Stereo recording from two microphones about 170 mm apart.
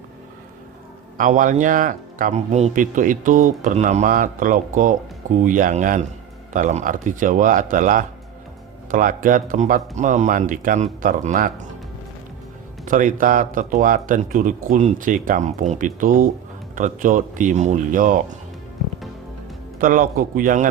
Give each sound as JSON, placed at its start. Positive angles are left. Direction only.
{"t": 1.2, "sound": "speech", "side_deg": -50}
{"t": 12.8, "sound": "speech", "side_deg": -50}
{"t": 19.8, "sound": "a man's voice", "side_deg": -55}